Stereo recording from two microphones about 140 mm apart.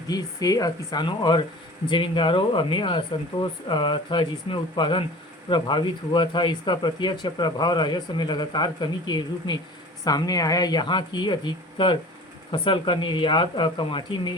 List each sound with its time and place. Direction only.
0.1 s speech: 25° left (ahead or behind)